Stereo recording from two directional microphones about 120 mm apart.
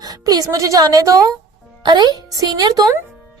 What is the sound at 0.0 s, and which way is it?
A woman's voice, 35° right (ahead or behind).